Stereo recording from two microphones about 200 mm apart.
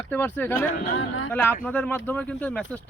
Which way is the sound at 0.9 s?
90° left.